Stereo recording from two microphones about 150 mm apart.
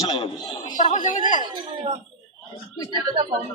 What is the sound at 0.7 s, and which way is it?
Speech, 55° left (ahead or behind).